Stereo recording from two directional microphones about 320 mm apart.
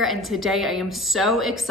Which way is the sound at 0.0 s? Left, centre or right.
Centre.